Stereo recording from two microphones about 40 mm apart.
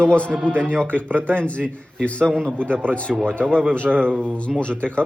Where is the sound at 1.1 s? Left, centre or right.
Right.